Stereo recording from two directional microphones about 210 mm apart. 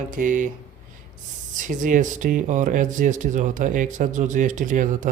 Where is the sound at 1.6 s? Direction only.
40° right (ahead or behind).